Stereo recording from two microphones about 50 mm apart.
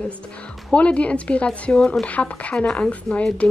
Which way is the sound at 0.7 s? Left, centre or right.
Left.